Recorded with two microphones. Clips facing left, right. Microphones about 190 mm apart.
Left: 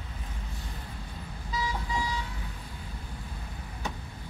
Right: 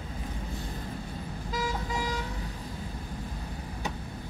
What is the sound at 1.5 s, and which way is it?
Vehicle, 45° right (ahead or behind).